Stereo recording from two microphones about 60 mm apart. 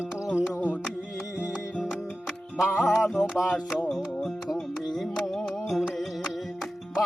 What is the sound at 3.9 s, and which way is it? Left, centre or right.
Music, centre.